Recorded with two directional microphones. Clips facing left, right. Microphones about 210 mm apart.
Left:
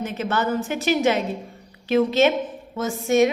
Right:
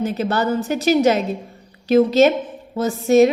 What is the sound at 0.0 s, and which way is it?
A woman's voice, 35° right (ahead or behind).